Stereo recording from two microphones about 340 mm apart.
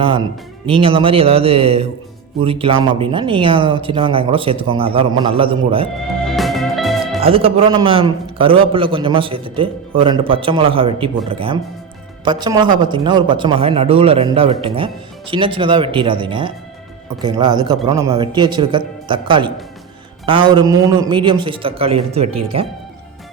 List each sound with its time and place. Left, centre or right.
0.0 s a man's voice: centre
6.1 s music: centre
7.2 s a man's voice: centre